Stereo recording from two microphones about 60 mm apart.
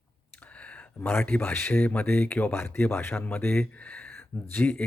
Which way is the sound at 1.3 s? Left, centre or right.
Left.